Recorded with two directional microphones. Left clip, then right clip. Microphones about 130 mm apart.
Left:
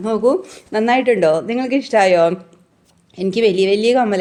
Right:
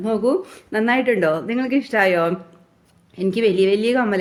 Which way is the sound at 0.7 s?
25° left (ahead or behind).